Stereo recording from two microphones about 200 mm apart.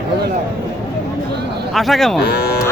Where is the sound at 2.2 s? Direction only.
55° left (ahead or behind).